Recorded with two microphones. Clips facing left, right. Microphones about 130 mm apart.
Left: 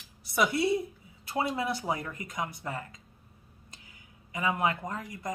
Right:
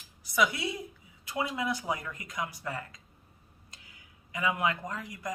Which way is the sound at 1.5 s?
30° left (ahead or behind).